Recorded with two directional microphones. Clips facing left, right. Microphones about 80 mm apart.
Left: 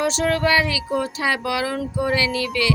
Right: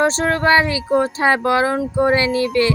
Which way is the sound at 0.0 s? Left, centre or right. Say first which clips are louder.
Right 3 dB; right.